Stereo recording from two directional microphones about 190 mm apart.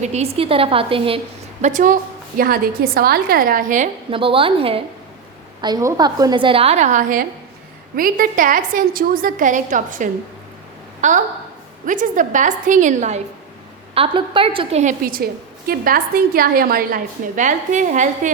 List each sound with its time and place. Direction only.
0.0 s a woman's voice: 35° right (ahead or behind)
1.6 s a woman's voice: 45° right (ahead or behind)
4.1 s a woman's voice: 30° right (ahead or behind)
13.9 s a woman's voice: 30° right (ahead or behind)